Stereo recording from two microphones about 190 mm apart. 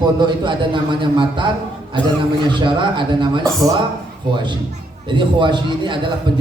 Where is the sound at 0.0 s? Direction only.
25° right (ahead or behind).